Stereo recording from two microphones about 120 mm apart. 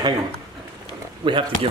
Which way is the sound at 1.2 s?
45° right (ahead or behind).